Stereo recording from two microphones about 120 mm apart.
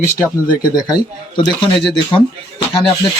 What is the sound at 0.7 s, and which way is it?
Speech, 35° left (ahead or behind).